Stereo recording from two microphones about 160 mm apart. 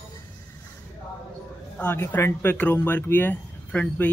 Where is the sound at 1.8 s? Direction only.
10° left (ahead or behind).